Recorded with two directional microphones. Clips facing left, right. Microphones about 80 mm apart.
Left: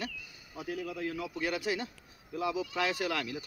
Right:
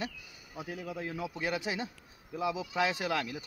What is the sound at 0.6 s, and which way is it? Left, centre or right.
Speech, centre.